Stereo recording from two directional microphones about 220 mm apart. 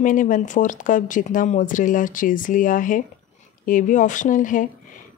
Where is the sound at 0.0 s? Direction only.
35° left (ahead or behind).